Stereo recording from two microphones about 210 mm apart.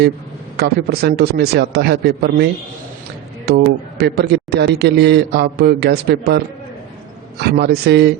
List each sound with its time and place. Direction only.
0.5 s a man's voice: 50° right (ahead or behind)